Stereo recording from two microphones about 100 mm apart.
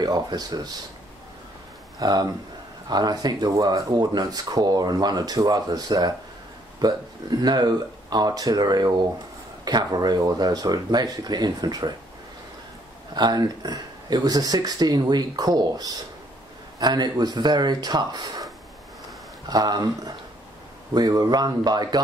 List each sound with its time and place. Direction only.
0.0 s speech: 40° right (ahead or behind)
2.0 s speech: 40° right (ahead or behind)
13.1 s speech: 45° right (ahead or behind)
19.5 s speech: 40° right (ahead or behind)